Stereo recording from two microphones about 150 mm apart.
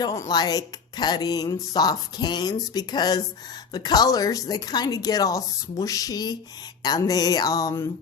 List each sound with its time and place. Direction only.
0.0 s speech: 25° left (ahead or behind)